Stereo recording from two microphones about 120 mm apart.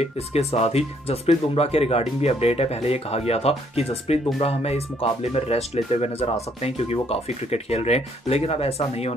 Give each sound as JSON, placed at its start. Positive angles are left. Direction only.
{"t": 0.0, "sound": "speech", "side_deg": 60}